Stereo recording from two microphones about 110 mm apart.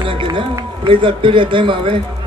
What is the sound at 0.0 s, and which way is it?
Run, 50° right (ahead or behind).